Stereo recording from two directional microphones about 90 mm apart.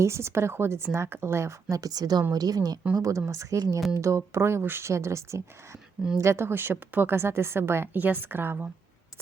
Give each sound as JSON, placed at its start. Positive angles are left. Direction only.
{"t": 0.0, "sound": "a woman's voice", "side_deg": -30}
{"t": 1.7, "sound": "a woman's voice", "side_deg": -45}